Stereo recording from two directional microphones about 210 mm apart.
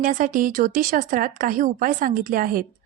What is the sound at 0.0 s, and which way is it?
Speech, 35° right (ahead or behind).